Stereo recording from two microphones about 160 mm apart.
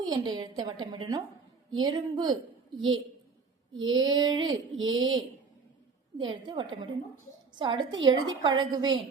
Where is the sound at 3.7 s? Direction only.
25° right (ahead or behind).